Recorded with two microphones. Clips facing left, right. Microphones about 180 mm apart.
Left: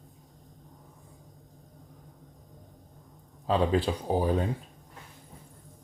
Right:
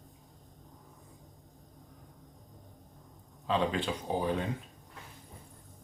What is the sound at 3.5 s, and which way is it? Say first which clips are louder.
Speech: left 5 dB; 40° left (ahead or behind).